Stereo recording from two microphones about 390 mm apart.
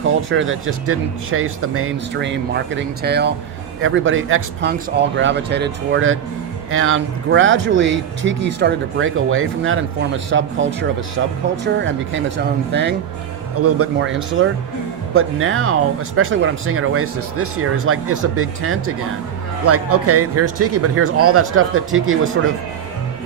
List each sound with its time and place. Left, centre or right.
0.1 s speech: right
13.6 s speech: right